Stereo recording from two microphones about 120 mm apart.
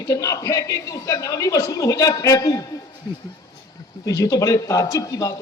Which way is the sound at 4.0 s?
30° left (ahead or behind).